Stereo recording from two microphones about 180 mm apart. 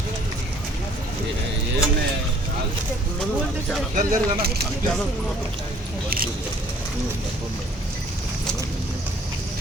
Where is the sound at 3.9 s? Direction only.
50° right (ahead or behind).